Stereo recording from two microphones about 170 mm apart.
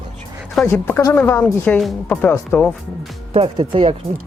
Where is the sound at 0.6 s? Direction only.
15° left (ahead or behind).